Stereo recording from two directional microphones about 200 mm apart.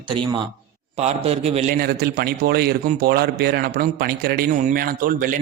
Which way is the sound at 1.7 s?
50° right (ahead or behind).